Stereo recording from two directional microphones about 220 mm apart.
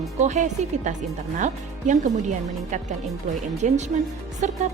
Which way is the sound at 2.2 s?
35° right (ahead or behind).